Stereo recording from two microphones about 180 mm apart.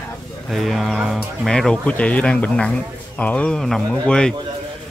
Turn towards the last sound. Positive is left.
turn(degrees=5)  # may be behind; listen again after turning